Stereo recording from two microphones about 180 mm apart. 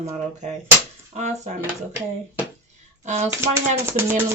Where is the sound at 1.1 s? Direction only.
40° right (ahead or behind).